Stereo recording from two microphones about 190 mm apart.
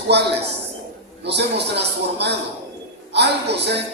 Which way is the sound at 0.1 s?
60° right (ahead or behind).